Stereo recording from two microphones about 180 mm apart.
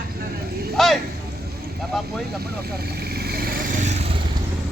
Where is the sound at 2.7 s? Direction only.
60° right (ahead or behind); by 4.0 s 40° right (ahead or behind).